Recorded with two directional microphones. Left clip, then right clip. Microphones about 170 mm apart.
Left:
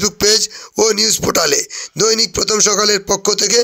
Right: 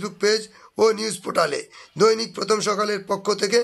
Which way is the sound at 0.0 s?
35° left (ahead or behind).